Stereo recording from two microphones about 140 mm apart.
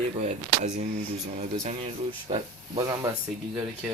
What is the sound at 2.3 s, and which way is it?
Speech, 35° right (ahead or behind).